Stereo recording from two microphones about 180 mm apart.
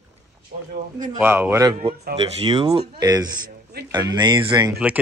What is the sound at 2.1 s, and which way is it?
Speech, 30° right (ahead or behind).